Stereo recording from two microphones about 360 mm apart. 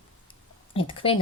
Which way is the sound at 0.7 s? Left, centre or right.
Centre.